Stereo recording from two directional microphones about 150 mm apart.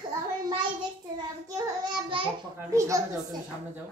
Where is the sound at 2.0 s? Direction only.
35° right (ahead or behind).